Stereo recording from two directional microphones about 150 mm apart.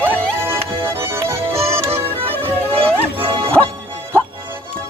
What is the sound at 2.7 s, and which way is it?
Speech, 40° right (ahead or behind).